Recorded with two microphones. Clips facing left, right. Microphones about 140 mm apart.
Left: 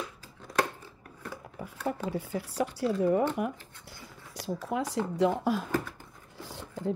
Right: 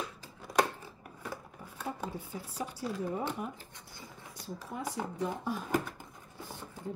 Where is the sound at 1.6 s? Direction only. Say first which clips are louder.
Left 8 dB; 90° left.